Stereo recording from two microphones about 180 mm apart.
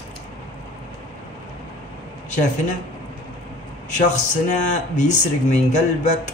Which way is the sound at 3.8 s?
45° left (ahead or behind).